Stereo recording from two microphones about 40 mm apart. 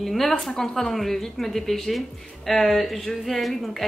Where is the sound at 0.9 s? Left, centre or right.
Centre.